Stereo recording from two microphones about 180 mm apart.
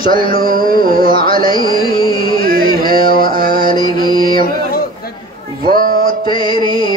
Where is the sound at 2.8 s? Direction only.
30° left (ahead or behind).